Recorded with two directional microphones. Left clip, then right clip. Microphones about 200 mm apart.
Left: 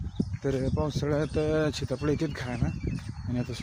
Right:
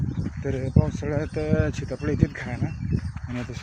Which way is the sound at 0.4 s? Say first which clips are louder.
Right 1 dB; 20° left (ahead or behind).